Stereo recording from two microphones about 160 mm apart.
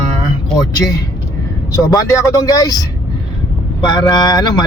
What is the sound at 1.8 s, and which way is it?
Speech, 20° left (ahead or behind).